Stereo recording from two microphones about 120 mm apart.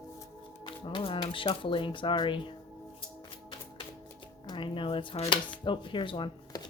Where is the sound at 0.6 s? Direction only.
45° left (ahead or behind).